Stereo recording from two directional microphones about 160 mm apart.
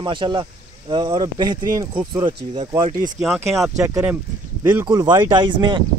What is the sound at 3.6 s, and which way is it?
Speech, 15° right (ahead or behind).